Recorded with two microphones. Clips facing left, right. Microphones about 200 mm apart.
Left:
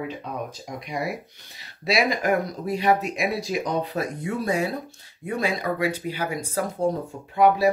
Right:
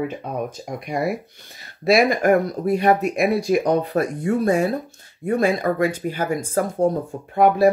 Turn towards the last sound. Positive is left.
turn(degrees=-50)  # may be behind; listen again after turning